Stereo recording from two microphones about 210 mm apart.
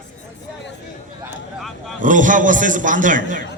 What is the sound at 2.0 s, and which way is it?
A man's voice, 40° right (ahead or behind).